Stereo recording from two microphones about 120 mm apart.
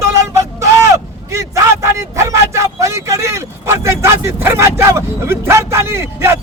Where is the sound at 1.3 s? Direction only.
25° right (ahead or behind).